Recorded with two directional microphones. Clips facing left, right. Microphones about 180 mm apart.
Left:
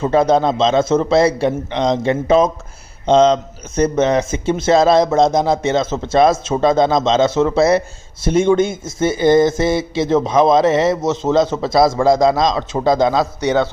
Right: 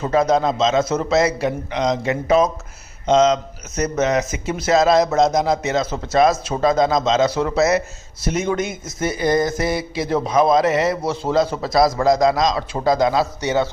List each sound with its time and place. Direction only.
0.0 s a man's voice: 30° left (ahead or behind)